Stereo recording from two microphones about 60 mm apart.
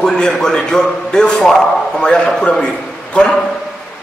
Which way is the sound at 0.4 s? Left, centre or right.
Centre.